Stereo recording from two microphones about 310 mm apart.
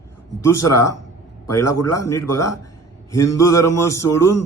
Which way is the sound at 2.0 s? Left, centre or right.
Left.